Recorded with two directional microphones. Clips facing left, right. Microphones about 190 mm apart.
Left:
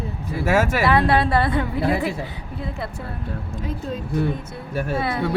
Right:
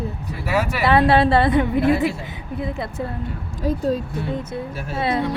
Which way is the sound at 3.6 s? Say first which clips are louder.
Right 11 dB; 35° right (ahead or behind).